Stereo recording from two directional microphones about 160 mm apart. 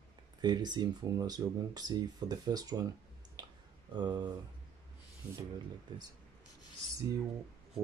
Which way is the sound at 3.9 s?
25° right (ahead or behind).